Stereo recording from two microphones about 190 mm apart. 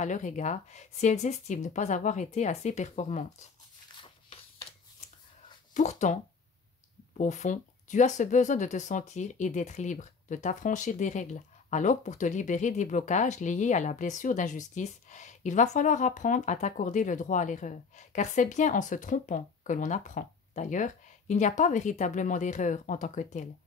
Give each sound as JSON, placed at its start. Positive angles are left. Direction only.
{"t": 0.0, "sound": "speech", "side_deg": 40}
{"t": 5.8, "sound": "speech", "side_deg": 40}
{"t": 7.2, "sound": "speech", "side_deg": 40}